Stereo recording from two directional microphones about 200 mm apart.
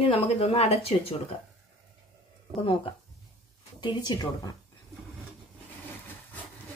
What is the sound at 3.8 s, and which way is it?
Speech, 20° left (ahead or behind).